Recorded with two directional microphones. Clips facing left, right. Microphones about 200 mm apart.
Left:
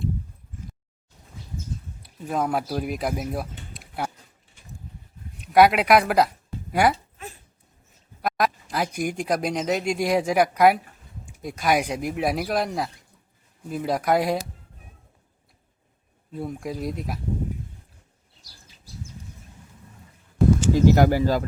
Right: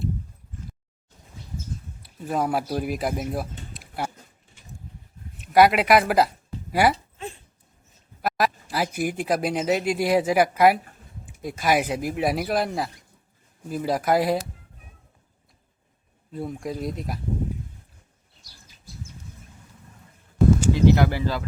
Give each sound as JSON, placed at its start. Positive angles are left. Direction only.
{"t": 2.0, "sound": "speech", "side_deg": 0}
{"t": 5.4, "sound": "speech", "side_deg": 0}
{"t": 7.2, "sound": "a sound", "side_deg": -25}
{"t": 8.2, "sound": "speech", "side_deg": -5}
{"t": 16.3, "sound": "speech", "side_deg": 0}
{"t": 20.7, "sound": "speech", "side_deg": 45}